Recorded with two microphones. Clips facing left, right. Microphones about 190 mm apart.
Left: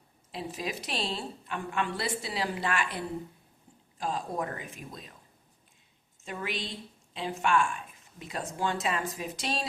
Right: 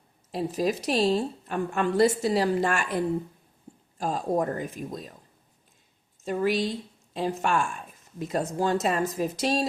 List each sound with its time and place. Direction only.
0.3 s a woman's voice: 40° right (ahead or behind)
6.2 s speech: 40° right (ahead or behind)